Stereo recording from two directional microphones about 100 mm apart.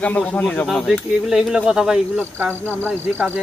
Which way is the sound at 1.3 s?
5° right (ahead or behind).